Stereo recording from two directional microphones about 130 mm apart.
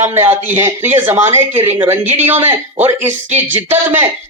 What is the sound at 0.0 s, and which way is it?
Speech, 20° right (ahead or behind).